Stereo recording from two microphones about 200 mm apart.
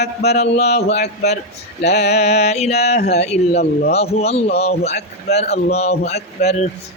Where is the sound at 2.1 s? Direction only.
30° left (ahead or behind).